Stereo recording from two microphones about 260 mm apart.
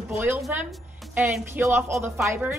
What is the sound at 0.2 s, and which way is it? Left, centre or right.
A woman's voice, centre.